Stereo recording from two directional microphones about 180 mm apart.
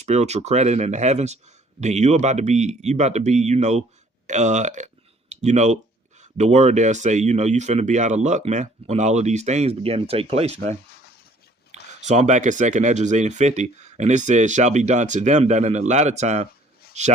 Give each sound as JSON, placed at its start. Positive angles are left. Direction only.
{"t": 0.0, "sound": "speech", "side_deg": -40}